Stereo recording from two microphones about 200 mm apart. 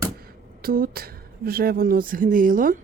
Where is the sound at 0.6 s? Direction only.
50° right (ahead or behind).